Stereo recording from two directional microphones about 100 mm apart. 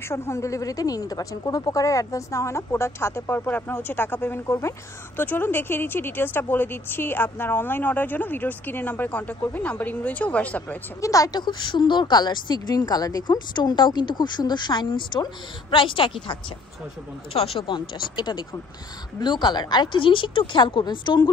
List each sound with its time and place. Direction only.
0.1 s speech: 30° left (ahead or behind)
11.0 s speech: 35° left (ahead or behind); by 16.3 s 55° left (ahead or behind)
17.3 s speech: 70° left (ahead or behind)
17.7 s speech: 50° left (ahead or behind)